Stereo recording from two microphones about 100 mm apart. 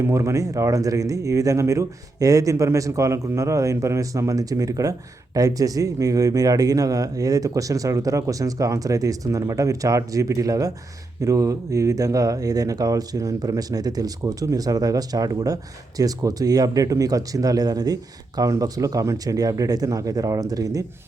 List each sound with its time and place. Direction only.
0.0 s speech: 30° right (ahead or behind)